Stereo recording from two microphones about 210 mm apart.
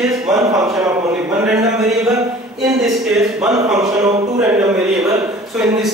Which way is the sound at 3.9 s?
15° right (ahead or behind).